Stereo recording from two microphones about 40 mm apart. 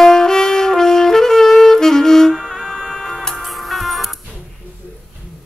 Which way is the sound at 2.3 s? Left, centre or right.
Centre.